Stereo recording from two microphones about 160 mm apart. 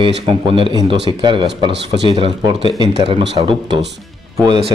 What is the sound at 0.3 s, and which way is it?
A man's voice, 35° right (ahead or behind).